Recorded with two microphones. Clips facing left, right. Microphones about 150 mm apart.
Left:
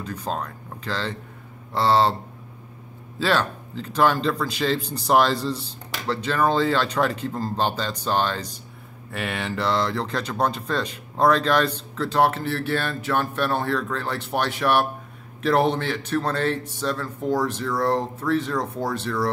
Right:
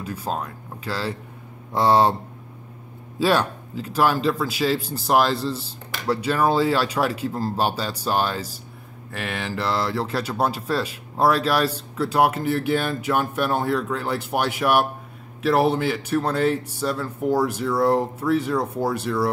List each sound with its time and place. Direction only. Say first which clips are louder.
0.0 s speech: right 1 dB; 10° right (ahead or behind)
3.2 s speech: right 2 dB; 15° right (ahead or behind)